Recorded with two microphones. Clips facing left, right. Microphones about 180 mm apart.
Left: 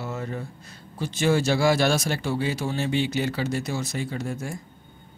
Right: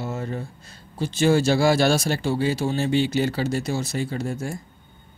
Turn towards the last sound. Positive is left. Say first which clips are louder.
# right 3 dB
turn(degrees=-30)  # may be behind; listen again after turning